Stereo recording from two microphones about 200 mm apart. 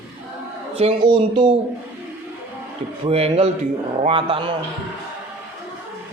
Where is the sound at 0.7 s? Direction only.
25° right (ahead or behind).